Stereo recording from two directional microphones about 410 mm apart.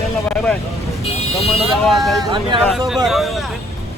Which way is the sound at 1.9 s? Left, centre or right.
Centre.